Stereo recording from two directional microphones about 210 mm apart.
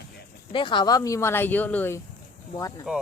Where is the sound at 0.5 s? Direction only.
20° left (ahead or behind).